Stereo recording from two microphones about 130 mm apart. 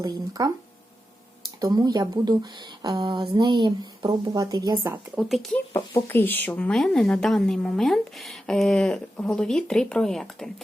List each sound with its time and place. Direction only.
0.0 s speech: 30° right (ahead or behind)
1.6 s speech: 30° right (ahead or behind)
5.1 s a woman's voice: centre (ahead or behind)
6.1 s a woman's voice: 15° left (ahead or behind)